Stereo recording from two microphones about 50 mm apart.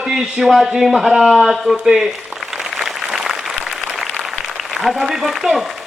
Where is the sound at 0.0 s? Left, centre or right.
Centre.